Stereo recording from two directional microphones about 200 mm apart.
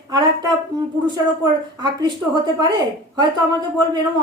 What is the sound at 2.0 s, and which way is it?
A woman's voice, 20° right (ahead or behind).